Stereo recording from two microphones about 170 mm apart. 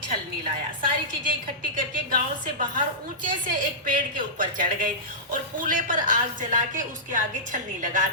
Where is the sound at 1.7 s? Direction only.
55° right (ahead or behind).